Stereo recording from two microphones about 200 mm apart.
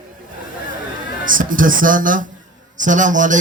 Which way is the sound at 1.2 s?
45° right (ahead or behind).